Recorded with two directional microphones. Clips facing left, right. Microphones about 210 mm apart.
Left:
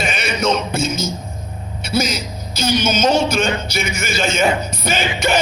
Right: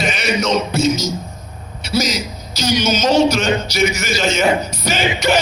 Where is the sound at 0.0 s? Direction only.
55° left (ahead or behind).